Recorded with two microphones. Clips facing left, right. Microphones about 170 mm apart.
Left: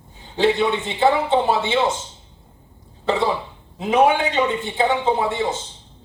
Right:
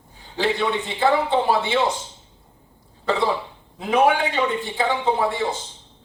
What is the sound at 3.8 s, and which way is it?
A man's voice, 20° left (ahead or behind).